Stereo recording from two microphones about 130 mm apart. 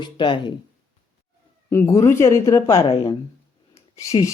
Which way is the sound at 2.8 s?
50° left (ahead or behind).